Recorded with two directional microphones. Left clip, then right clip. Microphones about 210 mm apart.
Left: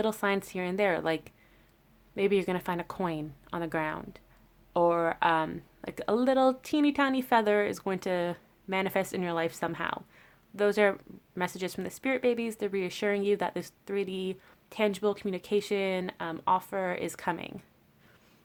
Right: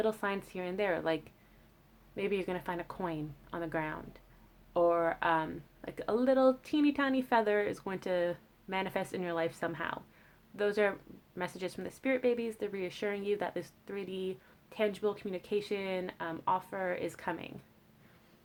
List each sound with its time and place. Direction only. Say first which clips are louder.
0.0 s speech: left 4 dB; 40° left (ahead or behind)